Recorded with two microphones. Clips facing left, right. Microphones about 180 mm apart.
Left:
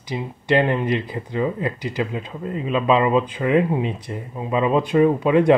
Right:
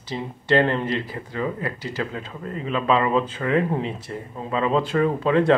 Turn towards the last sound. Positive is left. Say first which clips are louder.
# left 3 dB
turn(degrees=15)  # may be behind; listen again after turning